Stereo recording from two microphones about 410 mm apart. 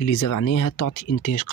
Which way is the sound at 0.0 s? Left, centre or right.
Left.